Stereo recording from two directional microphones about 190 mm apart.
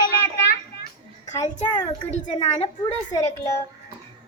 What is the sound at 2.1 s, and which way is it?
Speech, 40° left (ahead or behind).